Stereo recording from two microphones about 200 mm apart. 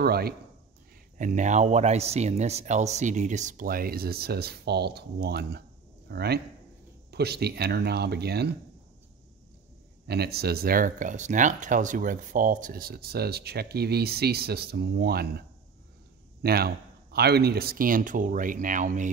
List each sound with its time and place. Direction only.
0.0 s speech: 50° right (ahead or behind)
1.1 s speech: 40° right (ahead or behind)
10.0 s speech: 55° right (ahead or behind)
16.4 s speech: 50° right (ahead or behind)